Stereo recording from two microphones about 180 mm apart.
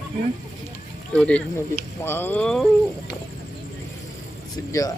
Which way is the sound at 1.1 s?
5° left (ahead or behind).